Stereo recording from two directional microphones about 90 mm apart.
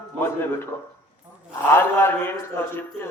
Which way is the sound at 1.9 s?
25° left (ahead or behind).